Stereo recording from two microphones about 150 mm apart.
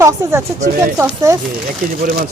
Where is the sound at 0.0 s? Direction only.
20° right (ahead or behind).